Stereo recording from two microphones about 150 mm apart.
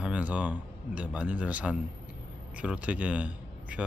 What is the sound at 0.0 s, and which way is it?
Speech, 10° right (ahead or behind).